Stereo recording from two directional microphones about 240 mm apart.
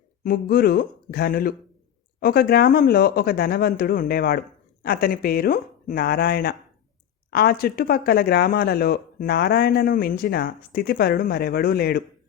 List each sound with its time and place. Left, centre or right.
0.3 s speech: left